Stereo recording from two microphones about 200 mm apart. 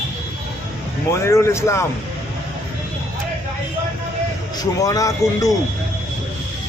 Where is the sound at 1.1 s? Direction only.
15° left (ahead or behind).